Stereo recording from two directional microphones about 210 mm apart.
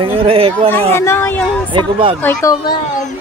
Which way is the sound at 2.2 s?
15° left (ahead or behind).